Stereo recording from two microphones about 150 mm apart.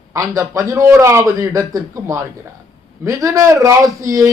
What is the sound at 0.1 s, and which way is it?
A man's voice, 20° right (ahead or behind).